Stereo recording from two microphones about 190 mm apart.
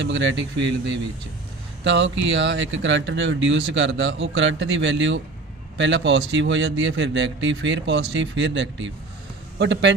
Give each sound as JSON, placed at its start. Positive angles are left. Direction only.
{"t": 0.0, "sound": "speech", "side_deg": -75}
{"t": 1.8, "sound": "speech", "side_deg": -70}